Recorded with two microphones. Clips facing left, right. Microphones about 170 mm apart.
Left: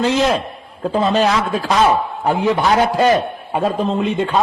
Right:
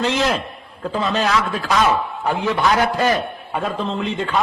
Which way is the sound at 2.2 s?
15° left (ahead or behind).